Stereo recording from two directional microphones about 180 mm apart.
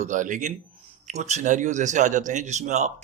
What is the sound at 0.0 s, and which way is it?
Speech, 45° right (ahead or behind).